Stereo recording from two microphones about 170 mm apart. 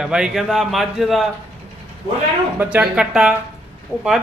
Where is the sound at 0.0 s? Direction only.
5° right (ahead or behind).